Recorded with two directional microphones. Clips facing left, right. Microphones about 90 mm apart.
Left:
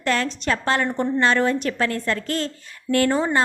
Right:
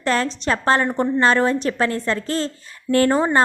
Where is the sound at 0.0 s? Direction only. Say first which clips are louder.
Right 2 dB; 35° right (ahead or behind).